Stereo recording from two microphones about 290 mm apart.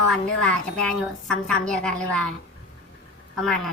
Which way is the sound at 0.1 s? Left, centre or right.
Centre.